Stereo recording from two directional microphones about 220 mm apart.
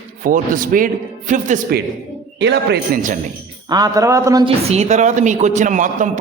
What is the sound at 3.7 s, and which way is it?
Speech, 15° right (ahead or behind).